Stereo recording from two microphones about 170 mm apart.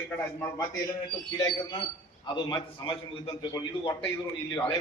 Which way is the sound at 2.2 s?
25° left (ahead or behind).